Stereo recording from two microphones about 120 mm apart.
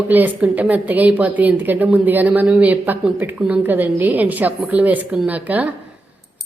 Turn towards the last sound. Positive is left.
turn(degrees=-15)  # may be behind; listen again after turning